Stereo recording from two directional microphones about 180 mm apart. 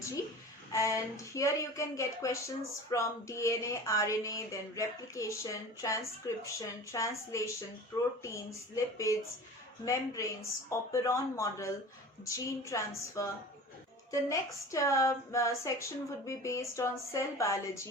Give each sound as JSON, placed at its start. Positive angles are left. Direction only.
{"t": 0.7, "sound": "speech", "side_deg": 15}